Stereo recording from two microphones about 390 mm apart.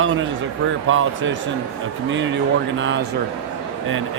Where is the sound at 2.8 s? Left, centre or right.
Right.